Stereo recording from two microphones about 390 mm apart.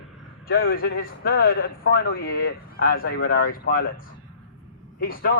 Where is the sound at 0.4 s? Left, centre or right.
Left.